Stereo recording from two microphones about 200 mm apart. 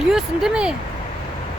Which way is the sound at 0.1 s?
Centre (ahead or behind).